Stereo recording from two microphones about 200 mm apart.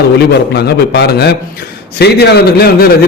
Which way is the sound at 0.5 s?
55° left (ahead or behind).